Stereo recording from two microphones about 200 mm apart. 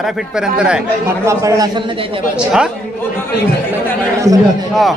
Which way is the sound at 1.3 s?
15° right (ahead or behind).